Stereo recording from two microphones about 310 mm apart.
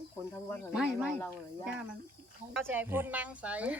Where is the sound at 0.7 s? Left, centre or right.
Centre.